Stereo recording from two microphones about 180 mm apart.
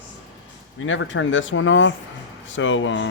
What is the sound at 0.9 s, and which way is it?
Speech, 90° left.